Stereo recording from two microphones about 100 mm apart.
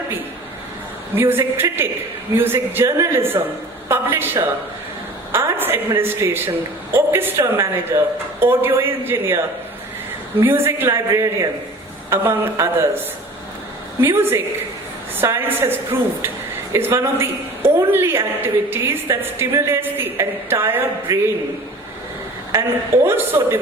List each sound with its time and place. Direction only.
1.1 s a woman's voice: 20° right (ahead or behind)
10.4 s a woman's voice: 25° right (ahead or behind)
14.0 s a woman's voice: 25° right (ahead or behind)
22.5 s a woman's voice: 25° right (ahead or behind)